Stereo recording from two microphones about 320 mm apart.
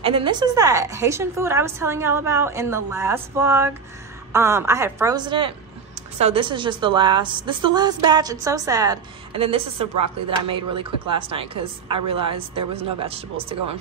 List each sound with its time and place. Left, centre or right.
0.0 s a woman's voice: centre